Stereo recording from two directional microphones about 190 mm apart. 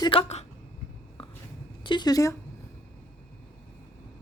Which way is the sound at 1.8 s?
25° left (ahead or behind).